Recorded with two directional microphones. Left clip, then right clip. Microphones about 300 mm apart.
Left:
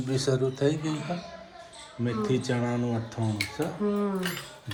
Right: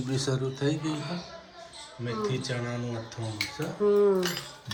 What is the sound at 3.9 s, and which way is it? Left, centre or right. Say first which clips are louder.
Speech: right 7 dB; right.